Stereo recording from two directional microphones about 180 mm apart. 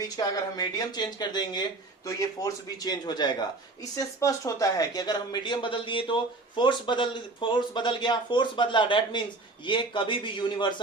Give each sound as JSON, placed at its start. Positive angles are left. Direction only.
{"t": 0.0, "sound": "speech", "side_deg": 20}